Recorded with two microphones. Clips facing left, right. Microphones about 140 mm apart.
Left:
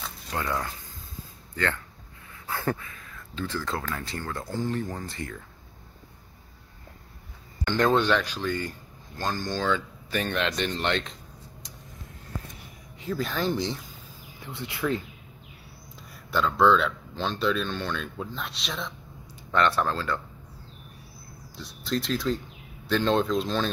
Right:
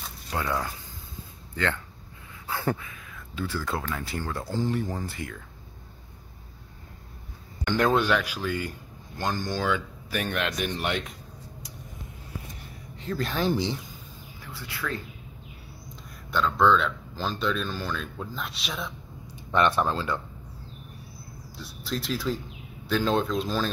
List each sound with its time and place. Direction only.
0.3 s speech: 15° right (ahead or behind)
2.4 s a sound: 15° right (ahead or behind)
3.3 s speech: 10° right (ahead or behind)
7.6 s speech: 10° right (ahead or behind)
13.0 s speech: 10° left (ahead or behind)
13.3 s speech: 5° right (ahead or behind)
14.4 s speech: 20° left (ahead or behind)
16.3 s speech: centre (ahead or behind)
19.3 s speech: 15° right (ahead or behind)
21.5 s speech: centre (ahead or behind)